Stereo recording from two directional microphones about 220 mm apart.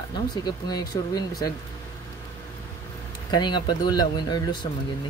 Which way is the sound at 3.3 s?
20° left (ahead or behind).